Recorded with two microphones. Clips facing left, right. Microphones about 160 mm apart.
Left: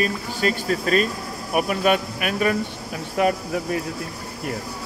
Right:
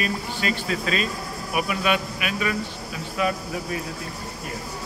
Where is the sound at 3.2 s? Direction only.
60° left (ahead or behind).